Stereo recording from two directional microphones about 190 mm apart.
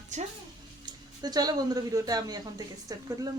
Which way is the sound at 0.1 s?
40° right (ahead or behind).